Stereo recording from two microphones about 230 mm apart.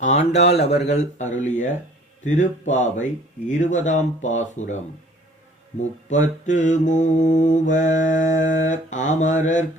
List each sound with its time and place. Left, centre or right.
0.5 s speech: left
0.9 s mantra: left
6.1 s mantra: left